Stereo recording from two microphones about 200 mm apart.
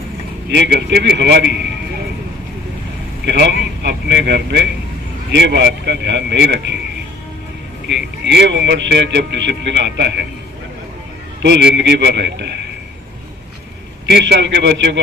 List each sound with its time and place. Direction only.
0.5 s a man's voice: 60° right (ahead or behind)
3.2 s a man's voice: 55° right (ahead or behind)
7.9 s a man's voice: 60° right (ahead or behind)
11.4 s a man's voice: 60° right (ahead or behind)
14.1 s a man's voice: 55° right (ahead or behind)